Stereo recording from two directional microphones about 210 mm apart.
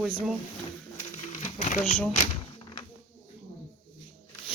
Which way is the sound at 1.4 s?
35° left (ahead or behind).